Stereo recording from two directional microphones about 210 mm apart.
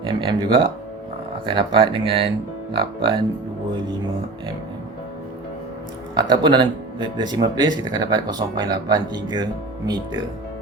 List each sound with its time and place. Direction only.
0.0 s speech: 25° right (ahead or behind)
6.1 s speech: 20° right (ahead or behind)